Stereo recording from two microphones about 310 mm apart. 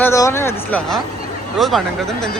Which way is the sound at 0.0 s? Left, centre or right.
Centre.